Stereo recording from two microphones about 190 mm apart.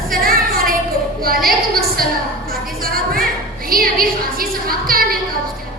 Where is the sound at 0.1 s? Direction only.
50° right (ahead or behind).